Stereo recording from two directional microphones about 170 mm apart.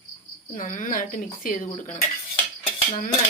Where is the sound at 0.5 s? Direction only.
50° left (ahead or behind).